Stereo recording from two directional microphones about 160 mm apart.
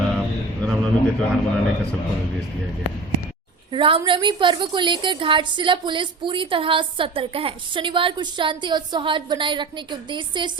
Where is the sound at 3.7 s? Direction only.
35° right (ahead or behind).